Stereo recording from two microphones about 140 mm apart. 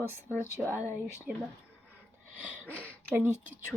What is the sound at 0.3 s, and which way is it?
Speech, 15° right (ahead or behind).